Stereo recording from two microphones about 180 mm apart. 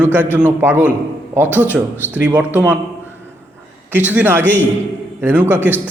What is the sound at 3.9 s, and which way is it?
A man's voice, 10° right (ahead or behind).